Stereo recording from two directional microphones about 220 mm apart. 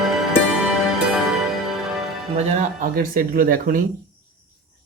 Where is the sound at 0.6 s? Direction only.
5° right (ahead or behind).